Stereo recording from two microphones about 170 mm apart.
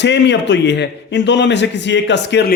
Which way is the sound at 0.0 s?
90° left.